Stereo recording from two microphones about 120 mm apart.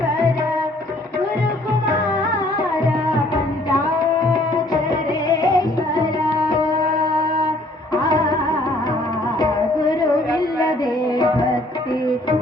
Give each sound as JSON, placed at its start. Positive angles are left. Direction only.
{"t": 5.3, "sound": "music", "side_deg": 35}
{"t": 8.1, "sound": "music", "side_deg": 35}
{"t": 9.4, "sound": "music", "side_deg": 35}